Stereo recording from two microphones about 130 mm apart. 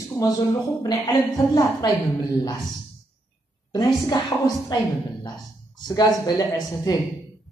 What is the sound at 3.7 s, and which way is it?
A woman's voice, 30° left (ahead or behind).